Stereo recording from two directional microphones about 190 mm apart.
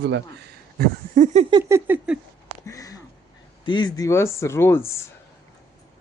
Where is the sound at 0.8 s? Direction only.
40° right (ahead or behind).